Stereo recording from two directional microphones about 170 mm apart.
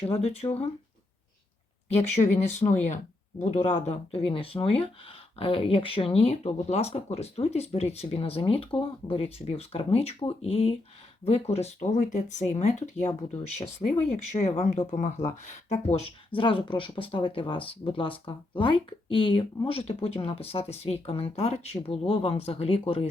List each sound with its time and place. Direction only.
0.0 s speech: 40° left (ahead or behind)
2.2 s speech: 35° left (ahead or behind)
2.8 s speech: 45° left (ahead or behind)